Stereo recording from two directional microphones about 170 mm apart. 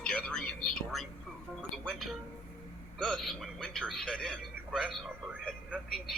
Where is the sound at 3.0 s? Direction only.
5° left (ahead or behind).